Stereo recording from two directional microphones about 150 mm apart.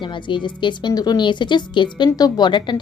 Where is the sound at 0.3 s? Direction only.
30° left (ahead or behind).